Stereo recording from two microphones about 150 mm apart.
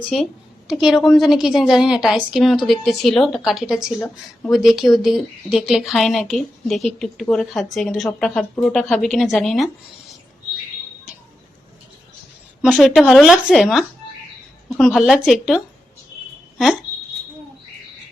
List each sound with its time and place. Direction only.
0.0 s a woman's voice: centre (ahead or behind)
12.6 s a woman's voice: 5° right (ahead or behind)